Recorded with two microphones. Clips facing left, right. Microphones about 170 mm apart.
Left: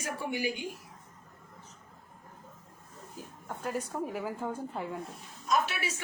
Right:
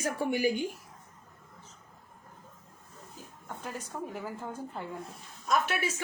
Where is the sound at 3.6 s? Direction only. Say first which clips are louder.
Left 5 dB; centre (ahead or behind).